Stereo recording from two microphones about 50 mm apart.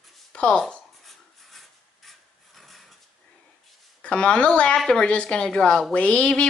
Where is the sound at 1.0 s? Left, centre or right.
Centre.